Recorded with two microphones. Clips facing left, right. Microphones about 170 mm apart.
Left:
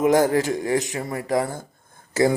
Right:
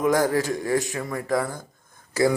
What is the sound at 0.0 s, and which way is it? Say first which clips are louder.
A man's voice: left 3 dB; 20° left (ahead or behind).